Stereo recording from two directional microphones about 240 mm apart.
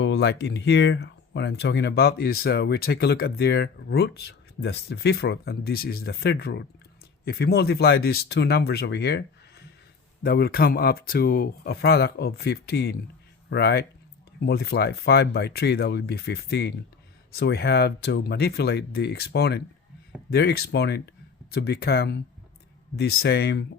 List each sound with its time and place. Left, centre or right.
0.0 s speech: left